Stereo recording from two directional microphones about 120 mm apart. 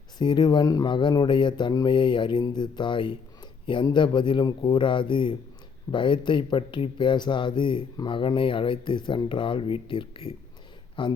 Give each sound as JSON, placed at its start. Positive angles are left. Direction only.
{"t": 0.2, "sound": "speech", "side_deg": 40}